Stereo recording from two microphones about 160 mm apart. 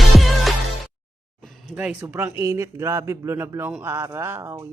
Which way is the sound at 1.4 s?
Centre (ahead or behind).